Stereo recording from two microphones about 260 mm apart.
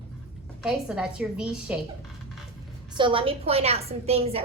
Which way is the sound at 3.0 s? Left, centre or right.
Centre.